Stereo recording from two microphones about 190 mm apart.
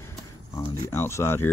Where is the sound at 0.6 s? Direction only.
15° left (ahead or behind).